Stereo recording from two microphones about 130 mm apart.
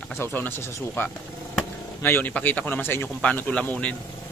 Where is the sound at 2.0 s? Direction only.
15° left (ahead or behind).